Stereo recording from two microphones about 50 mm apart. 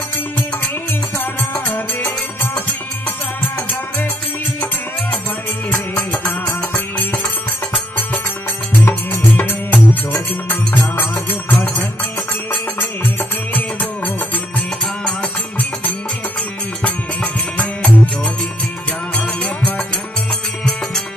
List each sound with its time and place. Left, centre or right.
1.1 s music: left
6.4 s music: left
8.8 s music: left
11.5 s music: left
13.5 s music: left
16.8 s music: left